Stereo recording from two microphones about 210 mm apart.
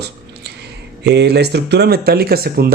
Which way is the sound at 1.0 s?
50° right (ahead or behind).